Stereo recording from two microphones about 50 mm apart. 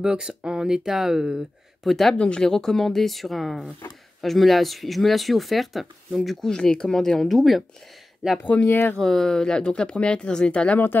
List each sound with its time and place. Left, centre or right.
0.0 s speech: centre
1.8 s speech: centre
2.1 s speech: centre
6.5 s speech: centre
8.6 s speech: left
8.9 s speech: centre